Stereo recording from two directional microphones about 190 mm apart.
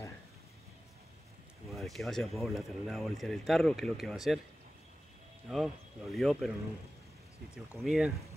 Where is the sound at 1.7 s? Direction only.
Centre (ahead or behind).